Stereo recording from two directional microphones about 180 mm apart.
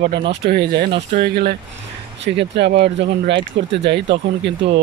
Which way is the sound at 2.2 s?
75° right (ahead or behind).